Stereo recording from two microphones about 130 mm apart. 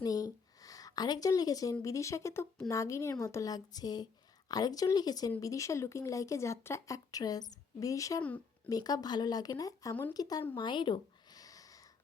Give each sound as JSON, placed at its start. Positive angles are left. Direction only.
{"t": 0.0, "sound": "a woman's voice", "side_deg": 30}
{"t": 8.2, "sound": "speech", "side_deg": 10}
{"t": 8.7, "sound": "speech", "side_deg": 30}
{"t": 10.5, "sound": "a sound", "side_deg": 40}